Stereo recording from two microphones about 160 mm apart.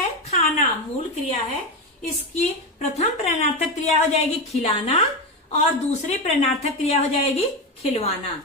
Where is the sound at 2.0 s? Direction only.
45° left (ahead or behind).